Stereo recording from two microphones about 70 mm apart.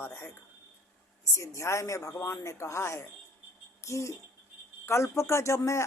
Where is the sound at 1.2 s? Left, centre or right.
Left.